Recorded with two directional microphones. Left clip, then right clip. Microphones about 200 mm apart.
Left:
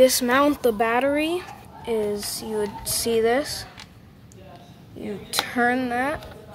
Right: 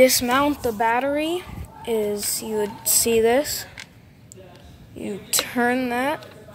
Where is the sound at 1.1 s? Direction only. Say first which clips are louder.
Even; centre (ahead or behind).